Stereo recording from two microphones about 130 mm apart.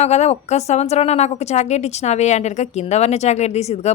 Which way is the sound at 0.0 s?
55° left (ahead or behind).